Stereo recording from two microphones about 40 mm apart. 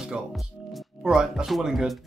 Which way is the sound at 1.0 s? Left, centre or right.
Centre.